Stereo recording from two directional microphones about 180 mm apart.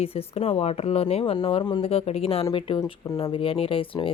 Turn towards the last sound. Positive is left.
turn(degrees=30)  # may be behind; listen again after turning